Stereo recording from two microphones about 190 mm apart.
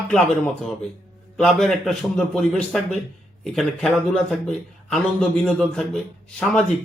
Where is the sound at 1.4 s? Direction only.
Centre (ahead or behind).